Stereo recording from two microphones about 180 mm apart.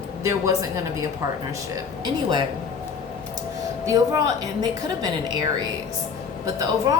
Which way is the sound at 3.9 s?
20° right (ahead or behind).